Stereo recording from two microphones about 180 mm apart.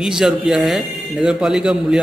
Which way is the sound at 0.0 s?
Centre (ahead or behind).